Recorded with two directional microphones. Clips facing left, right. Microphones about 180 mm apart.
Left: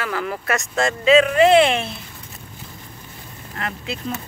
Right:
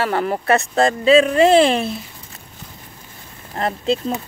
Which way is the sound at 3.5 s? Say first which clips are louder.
Right 7 dB; 35° right (ahead or behind).